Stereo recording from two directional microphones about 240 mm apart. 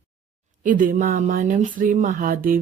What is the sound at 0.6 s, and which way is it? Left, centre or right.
Speech, right.